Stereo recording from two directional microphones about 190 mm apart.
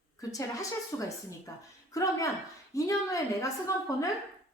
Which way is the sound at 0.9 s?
10° left (ahead or behind).